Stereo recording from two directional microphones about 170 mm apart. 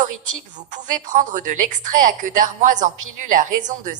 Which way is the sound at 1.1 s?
50° right (ahead or behind).